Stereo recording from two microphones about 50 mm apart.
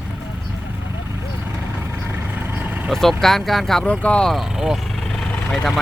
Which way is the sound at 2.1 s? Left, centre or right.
Right.